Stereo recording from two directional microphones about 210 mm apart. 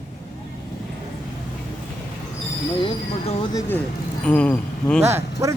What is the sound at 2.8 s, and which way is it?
Speech, 25° left (ahead or behind).